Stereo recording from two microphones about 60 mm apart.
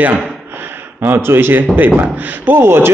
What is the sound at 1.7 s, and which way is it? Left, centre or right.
Speech, right.